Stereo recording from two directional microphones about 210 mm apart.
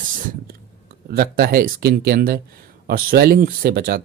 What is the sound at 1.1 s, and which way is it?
Speech, 45° right (ahead or behind).